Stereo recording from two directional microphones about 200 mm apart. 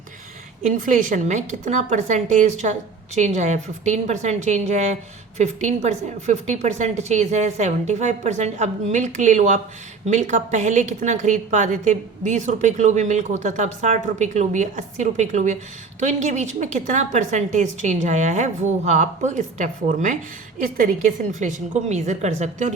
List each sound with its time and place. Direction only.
0.7 s a woman's voice: 40° right (ahead or behind)